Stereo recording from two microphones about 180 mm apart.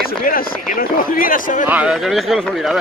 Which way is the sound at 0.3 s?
50° left (ahead or behind).